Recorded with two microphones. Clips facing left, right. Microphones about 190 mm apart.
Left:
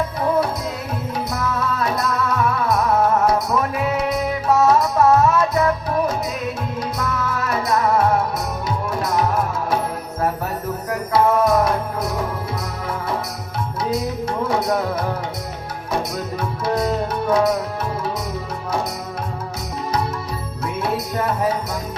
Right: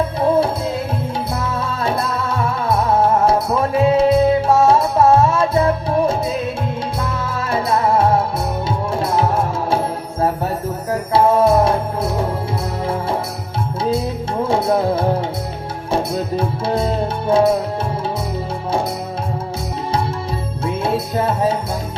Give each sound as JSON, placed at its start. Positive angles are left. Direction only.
{"t": 0.2, "sound": "music", "side_deg": -30}
{"t": 13.9, "sound": "music", "side_deg": -25}
{"t": 20.7, "sound": "music", "side_deg": -30}